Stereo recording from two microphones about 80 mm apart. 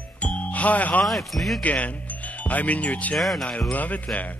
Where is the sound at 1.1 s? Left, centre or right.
Centre.